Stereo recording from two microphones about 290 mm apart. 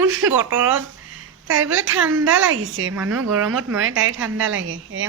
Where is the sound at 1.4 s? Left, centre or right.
Right.